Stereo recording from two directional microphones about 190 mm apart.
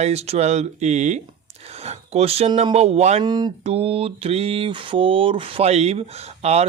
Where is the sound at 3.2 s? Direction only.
20° right (ahead or behind).